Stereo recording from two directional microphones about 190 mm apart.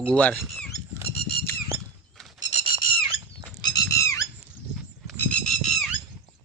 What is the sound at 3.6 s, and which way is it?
Squawk, 20° left (ahead or behind).